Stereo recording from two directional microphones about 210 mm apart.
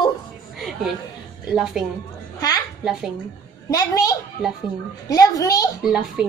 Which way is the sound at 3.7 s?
15° left (ahead or behind).